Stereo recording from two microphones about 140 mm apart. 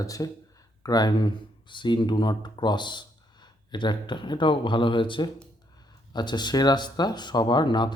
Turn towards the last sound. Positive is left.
turn(degrees=30)  # may be behind; listen again after turning